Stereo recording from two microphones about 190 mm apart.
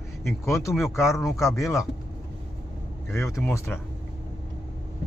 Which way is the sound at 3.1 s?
15° left (ahead or behind).